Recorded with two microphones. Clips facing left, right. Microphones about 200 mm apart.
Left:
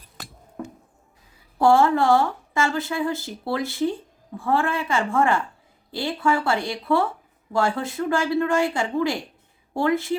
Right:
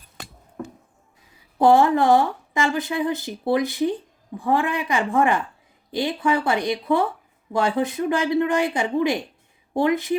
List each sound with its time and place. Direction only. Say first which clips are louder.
1.5 s speech: right 2 dB; 20° right (ahead or behind)